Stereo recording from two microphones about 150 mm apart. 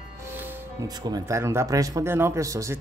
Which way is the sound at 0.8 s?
25° right (ahead or behind).